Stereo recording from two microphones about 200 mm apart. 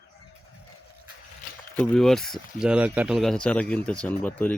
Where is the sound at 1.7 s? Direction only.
5° left (ahead or behind).